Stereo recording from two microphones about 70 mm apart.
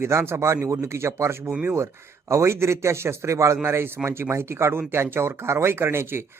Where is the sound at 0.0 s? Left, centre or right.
Right.